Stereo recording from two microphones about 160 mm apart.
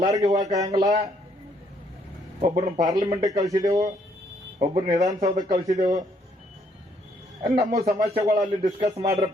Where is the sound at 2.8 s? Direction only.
25° right (ahead or behind).